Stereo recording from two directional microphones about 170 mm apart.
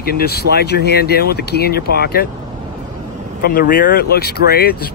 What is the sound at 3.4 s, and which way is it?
Speech, 60° left (ahead or behind).